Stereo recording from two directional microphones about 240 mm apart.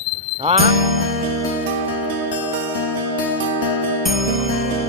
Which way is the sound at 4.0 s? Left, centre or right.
Centre.